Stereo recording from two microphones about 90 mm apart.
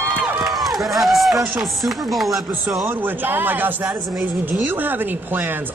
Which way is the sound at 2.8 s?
20° right (ahead or behind).